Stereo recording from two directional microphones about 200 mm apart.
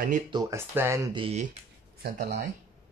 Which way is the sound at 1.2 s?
35° right (ahead or behind).